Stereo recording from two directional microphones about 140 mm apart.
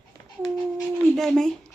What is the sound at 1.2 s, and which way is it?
Speech, 5° left (ahead or behind).